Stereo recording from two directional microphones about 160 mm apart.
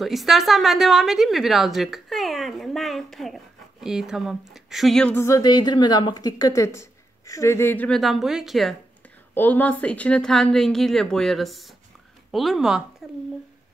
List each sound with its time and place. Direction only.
0.0 s a woman's voice: centre (ahead or behind)
5.1 s a woman's voice: 20° left (ahead or behind); by 8.7 s centre (ahead or behind)
9.3 s speech: 10° left (ahead or behind)